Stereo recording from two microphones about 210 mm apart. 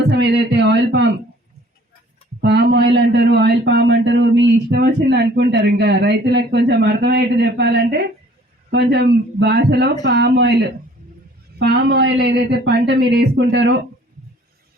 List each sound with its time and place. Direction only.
0.2 s speech: 55° right (ahead or behind)
2.4 s speech: 50° right (ahead or behind)
11.6 s speech: 50° right (ahead or behind)